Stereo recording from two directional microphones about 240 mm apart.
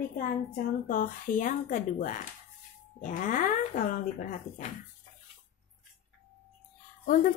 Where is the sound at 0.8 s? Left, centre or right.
Left.